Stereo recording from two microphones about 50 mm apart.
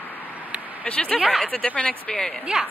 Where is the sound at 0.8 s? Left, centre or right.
Left.